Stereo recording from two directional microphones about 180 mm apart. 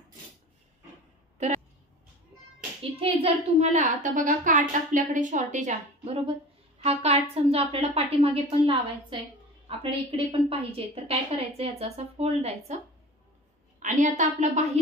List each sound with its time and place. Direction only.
2.8 s a woman's voice: 30° right (ahead or behind)
13.8 s a woman's voice: 45° right (ahead or behind)